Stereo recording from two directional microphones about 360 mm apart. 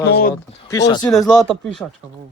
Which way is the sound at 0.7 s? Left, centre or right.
Centre.